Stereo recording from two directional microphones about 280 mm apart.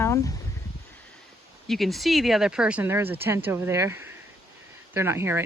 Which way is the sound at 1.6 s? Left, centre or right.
Centre.